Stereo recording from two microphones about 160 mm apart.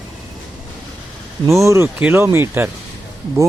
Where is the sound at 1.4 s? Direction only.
20° right (ahead or behind).